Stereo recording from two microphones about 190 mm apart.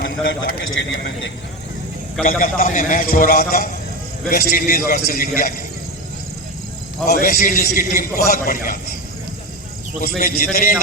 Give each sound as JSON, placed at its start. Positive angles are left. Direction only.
{"t": 0.0, "sound": "a man's voice", "side_deg": 60}
{"t": 2.4, "sound": "a man's voice", "side_deg": 45}
{"t": 7.1, "sound": "a man's voice", "side_deg": 50}
{"t": 10.0, "sound": "a man's voice", "side_deg": 50}